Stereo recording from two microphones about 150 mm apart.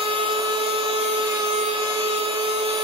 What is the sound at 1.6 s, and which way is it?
Tools, 45° right (ahead or behind).